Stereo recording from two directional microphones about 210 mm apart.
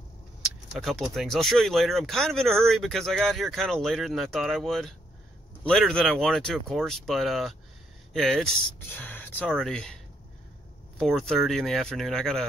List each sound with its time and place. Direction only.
0.7 s speech: centre (ahead or behind)
11.0 s speech: centre (ahead or behind)